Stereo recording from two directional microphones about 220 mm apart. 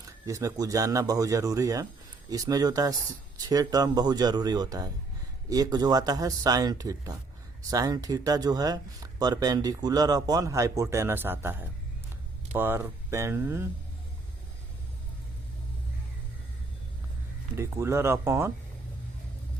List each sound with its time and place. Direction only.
0.3 s speech: 15° right (ahead or behind)
17.5 s speech: 10° right (ahead or behind)